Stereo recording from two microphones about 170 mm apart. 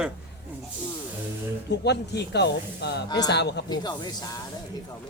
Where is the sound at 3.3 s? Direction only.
80° left.